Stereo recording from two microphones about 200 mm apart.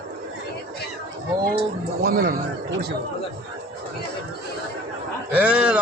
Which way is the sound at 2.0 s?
50° right (ahead or behind).